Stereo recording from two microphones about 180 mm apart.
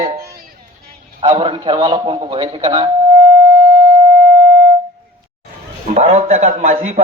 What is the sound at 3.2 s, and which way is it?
Music, 15° right (ahead or behind).